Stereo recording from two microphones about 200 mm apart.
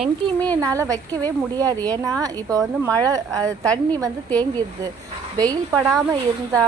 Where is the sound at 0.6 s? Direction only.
15° right (ahead or behind).